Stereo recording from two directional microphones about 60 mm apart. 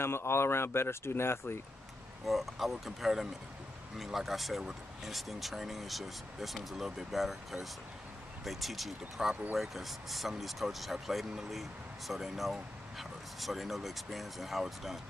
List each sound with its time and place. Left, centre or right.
0.0 s speech: left
2.2 s speech: centre